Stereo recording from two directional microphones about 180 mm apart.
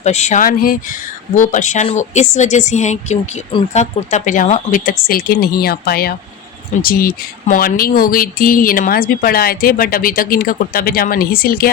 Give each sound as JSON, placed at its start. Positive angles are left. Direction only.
{"t": 0.0, "sound": "speech", "side_deg": 40}